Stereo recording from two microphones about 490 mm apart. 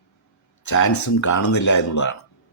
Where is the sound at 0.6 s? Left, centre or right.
Left.